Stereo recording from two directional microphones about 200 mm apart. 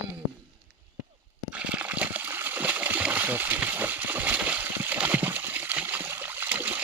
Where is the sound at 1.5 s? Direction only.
5° right (ahead or behind).